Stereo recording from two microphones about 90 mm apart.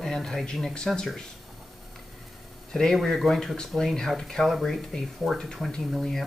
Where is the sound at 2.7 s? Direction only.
5° left (ahead or behind).